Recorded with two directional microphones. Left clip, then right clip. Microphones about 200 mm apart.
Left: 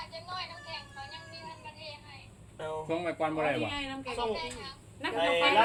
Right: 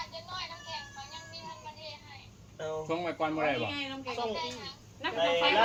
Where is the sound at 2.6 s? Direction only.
45° left (ahead or behind).